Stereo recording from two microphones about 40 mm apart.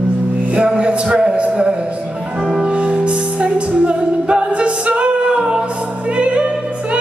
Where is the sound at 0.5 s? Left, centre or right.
Right.